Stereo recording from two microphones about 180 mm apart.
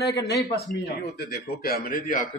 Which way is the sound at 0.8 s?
60° left (ahead or behind).